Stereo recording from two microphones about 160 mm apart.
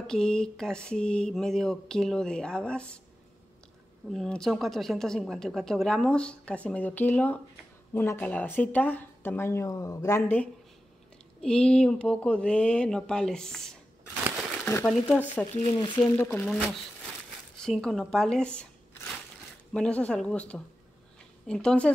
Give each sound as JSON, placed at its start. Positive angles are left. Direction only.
{"t": 0.0, "sound": "speech", "side_deg": 5}
{"t": 4.1, "sound": "speech", "side_deg": 5}
{"t": 14.9, "sound": "speech", "side_deg": 10}
{"t": 15.5, "sound": "speech", "side_deg": 35}
{"t": 16.2, "sound": "speech", "side_deg": 10}
{"t": 16.5, "sound": "speech", "side_deg": -5}